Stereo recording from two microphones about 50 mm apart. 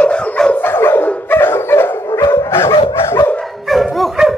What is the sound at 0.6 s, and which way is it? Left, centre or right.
Dog, left.